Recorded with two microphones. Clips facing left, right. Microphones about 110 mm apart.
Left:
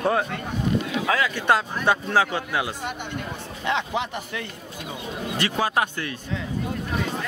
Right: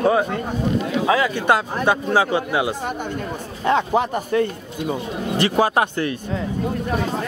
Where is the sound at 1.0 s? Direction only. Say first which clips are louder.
Right 6 dB; 25° right (ahead or behind).